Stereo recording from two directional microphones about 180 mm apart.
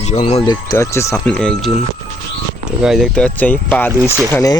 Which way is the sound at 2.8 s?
Centre (ahead or behind).